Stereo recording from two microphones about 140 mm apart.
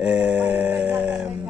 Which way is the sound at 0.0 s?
10° right (ahead or behind).